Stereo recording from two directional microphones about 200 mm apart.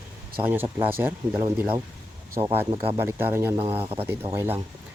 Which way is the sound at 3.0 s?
10° right (ahead or behind).